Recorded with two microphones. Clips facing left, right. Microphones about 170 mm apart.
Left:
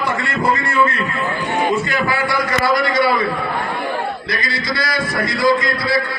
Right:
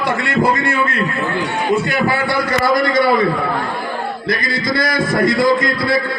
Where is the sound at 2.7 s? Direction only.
45° right (ahead or behind).